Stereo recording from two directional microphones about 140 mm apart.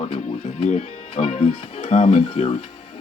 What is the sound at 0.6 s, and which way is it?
Speech, 55° left (ahead or behind).